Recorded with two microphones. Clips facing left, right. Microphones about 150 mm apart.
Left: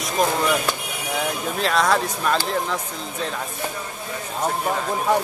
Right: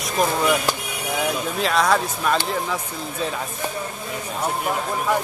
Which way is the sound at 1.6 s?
Centre (ahead or behind).